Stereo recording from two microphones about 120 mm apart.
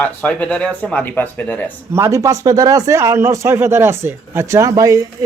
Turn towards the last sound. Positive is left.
turn(degrees=-30)  # may be behind; listen again after turning